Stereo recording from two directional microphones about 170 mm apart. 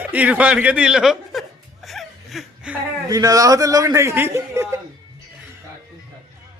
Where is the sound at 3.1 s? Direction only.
20° right (ahead or behind).